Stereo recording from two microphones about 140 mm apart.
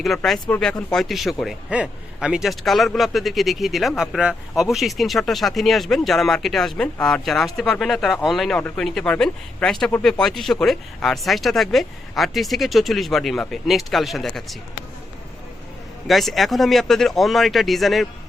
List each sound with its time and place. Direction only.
0.0 s a man's voice: centre (ahead or behind)
16.0 s a man's voice: centre (ahead or behind)